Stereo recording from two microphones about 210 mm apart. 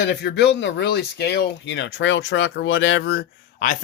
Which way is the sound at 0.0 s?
55° left (ahead or behind).